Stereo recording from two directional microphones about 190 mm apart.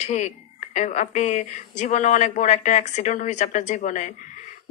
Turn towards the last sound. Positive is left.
turn(degrees=40)  # may be behind; listen again after turning